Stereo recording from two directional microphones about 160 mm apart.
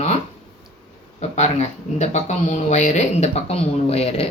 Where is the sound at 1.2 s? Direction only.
40° left (ahead or behind).